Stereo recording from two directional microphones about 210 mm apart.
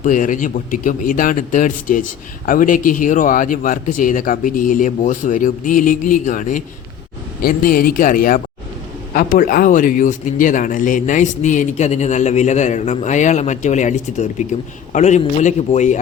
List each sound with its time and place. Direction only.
0.0 s a man's voice: 40° left (ahead or behind)